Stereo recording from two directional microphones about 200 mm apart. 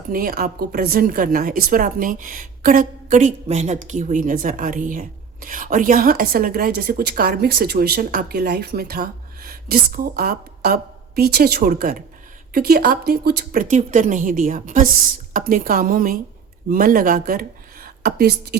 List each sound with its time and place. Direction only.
0.1 s a woman's voice: 45° right (ahead or behind)